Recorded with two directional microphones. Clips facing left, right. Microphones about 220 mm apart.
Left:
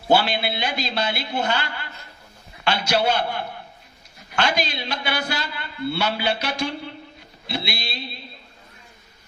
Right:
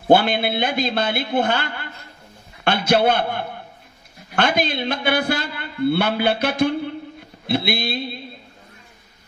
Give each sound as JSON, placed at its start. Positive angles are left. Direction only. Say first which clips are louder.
{"t": 0.1, "sound": "a woman's voice", "louder": "right 4 dB", "side_deg": -55}